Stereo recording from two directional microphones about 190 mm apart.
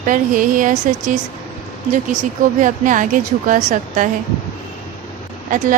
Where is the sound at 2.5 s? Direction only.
45° right (ahead or behind).